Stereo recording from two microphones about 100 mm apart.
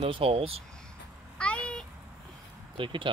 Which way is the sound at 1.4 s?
10° left (ahead or behind).